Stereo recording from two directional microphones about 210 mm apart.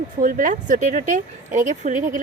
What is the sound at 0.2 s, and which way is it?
Speech, 40° right (ahead or behind).